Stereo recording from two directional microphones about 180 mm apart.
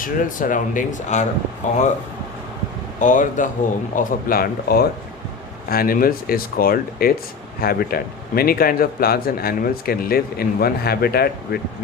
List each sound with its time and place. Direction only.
0.0 s speech: 50° left (ahead or behind)
3.0 s a man's voice: 45° left (ahead or behind)